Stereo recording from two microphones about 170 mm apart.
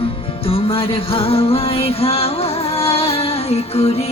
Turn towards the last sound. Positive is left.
turn(degrees=40)  # may be behind; listen again after turning